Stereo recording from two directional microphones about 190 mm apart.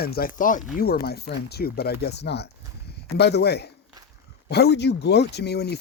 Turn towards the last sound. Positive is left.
turn(degrees=60)  # may be behind; listen again after turning